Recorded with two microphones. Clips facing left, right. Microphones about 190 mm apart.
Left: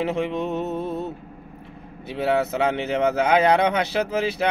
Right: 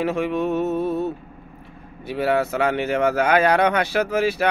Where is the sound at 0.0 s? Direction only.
20° left (ahead or behind).